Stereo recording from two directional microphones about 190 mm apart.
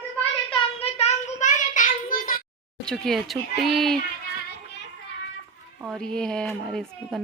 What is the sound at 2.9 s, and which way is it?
Speech, centre (ahead or behind).